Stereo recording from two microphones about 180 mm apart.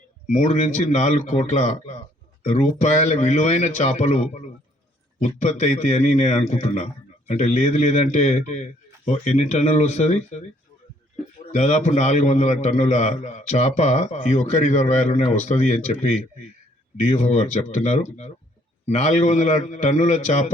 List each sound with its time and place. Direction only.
0.3 s a man's voice: 40° left (ahead or behind)
11.5 s a man's voice: 40° left (ahead or behind)